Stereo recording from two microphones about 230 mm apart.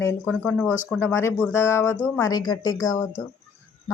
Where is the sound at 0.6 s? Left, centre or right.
Centre.